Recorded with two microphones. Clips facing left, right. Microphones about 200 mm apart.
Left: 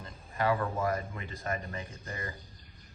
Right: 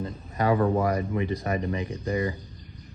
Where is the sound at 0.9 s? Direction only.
15° right (ahead or behind).